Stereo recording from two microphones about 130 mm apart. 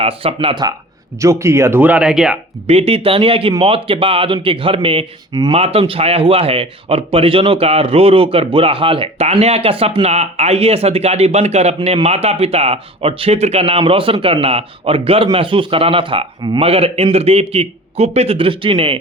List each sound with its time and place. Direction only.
0.0 s speech: 50° right (ahead or behind)
0.3 s speech: 35° right (ahead or behind)
1.2 s speech: 20° right (ahead or behind); by 2.4 s 5° right (ahead or behind)
2.6 s speech: 50° right (ahead or behind)
5.3 s speech: 30° right (ahead or behind)
5.5 s speech: 50° right (ahead or behind)